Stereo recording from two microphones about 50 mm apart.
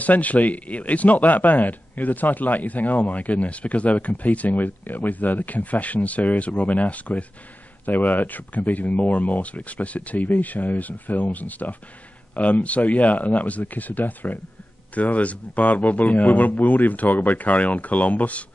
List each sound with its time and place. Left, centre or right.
0.0 s a man's voice: left